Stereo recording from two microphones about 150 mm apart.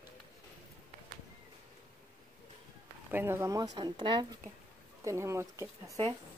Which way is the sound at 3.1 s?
15° right (ahead or behind).